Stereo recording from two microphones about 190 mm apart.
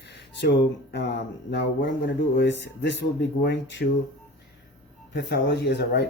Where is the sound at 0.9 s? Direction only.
65° left (ahead or behind).